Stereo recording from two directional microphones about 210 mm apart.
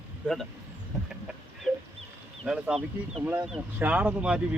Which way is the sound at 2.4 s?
5° right (ahead or behind).